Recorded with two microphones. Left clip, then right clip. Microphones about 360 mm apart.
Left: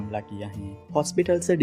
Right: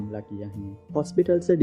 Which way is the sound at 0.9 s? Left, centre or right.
Centre.